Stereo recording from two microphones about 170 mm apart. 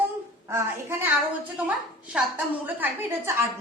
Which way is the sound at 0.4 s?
15° right (ahead or behind).